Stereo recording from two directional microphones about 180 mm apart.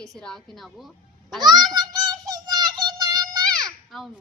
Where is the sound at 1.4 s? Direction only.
20° right (ahead or behind).